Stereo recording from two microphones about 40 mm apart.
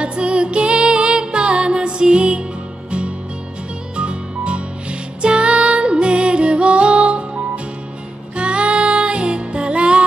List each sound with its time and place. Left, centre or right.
0.0 s music: right
3.9 s music: right